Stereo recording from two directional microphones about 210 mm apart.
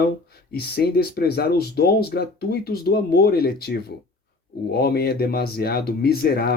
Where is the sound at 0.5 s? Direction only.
50° left (ahead or behind).